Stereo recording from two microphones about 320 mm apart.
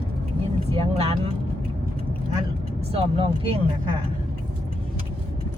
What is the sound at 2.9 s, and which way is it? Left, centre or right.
Speech, centre.